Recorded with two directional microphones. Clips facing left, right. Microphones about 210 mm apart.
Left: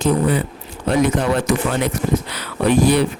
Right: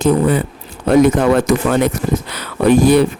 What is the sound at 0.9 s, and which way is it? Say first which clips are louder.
Speech: right 6 dB; 45° right (ahead or behind).